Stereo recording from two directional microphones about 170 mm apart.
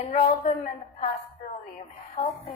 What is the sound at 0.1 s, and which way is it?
Speech, 40° left (ahead or behind).